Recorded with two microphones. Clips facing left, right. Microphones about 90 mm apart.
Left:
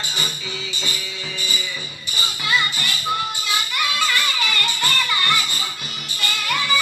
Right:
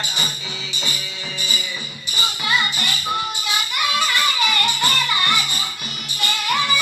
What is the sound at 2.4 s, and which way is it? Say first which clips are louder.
Music: even; 20° right (ahead or behind).